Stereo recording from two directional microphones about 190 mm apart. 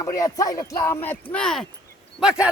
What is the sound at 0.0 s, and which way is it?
Speech, 20° left (ahead or behind).